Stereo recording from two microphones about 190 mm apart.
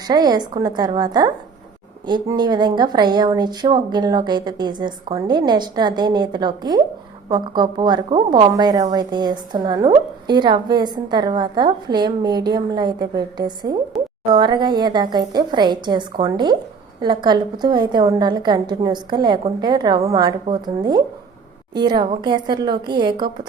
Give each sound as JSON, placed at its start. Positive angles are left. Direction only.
{"t": 0.1, "sound": "a woman's voice", "side_deg": -20}